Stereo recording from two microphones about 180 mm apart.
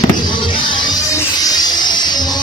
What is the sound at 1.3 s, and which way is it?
Music, 20° left (ahead or behind).